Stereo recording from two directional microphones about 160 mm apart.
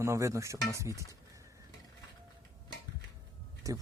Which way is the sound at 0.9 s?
20° left (ahead or behind).